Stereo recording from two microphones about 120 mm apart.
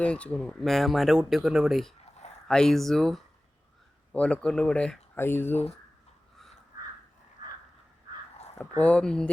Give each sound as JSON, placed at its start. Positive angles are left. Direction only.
{"t": 0.0, "sound": "speech", "side_deg": 10}
{"t": 8.8, "sound": "speech", "side_deg": 10}